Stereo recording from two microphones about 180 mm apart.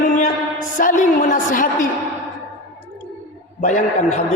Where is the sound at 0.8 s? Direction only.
50° left (ahead or behind).